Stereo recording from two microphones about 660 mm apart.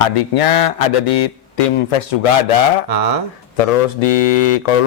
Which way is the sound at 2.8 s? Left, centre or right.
Right.